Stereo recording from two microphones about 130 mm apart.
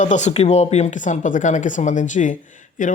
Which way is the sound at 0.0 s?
65° left (ahead or behind).